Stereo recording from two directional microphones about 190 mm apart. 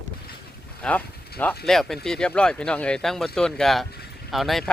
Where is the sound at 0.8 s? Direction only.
5° left (ahead or behind).